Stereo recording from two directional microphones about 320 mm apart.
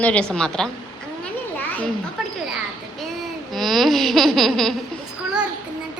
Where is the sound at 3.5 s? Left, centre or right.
Centre.